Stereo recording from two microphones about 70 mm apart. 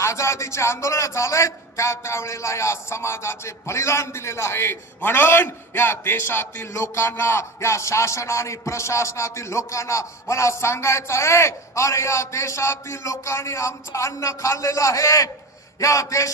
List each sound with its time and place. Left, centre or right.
0.0 s a man's voice: left